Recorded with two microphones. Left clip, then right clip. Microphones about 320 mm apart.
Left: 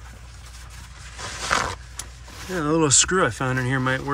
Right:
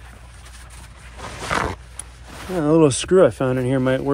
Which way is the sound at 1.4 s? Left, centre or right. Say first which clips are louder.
Right 1 dB; right.